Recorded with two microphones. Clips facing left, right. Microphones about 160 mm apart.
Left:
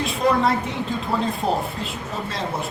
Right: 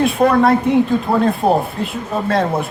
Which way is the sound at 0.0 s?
55° right (ahead or behind).